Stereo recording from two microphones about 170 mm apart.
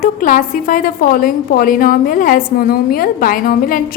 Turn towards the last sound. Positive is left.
turn(degrees=55)  # may be behind; listen again after turning